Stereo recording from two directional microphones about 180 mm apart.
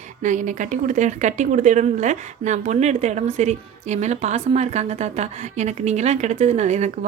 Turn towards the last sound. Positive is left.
turn(degrees=-40)  # may be behind; listen again after turning